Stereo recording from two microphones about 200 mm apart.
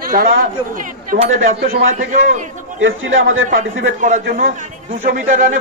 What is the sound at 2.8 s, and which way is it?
Speech, 80° right.